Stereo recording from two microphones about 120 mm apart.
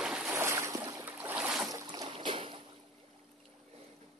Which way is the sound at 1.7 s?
35° right (ahead or behind).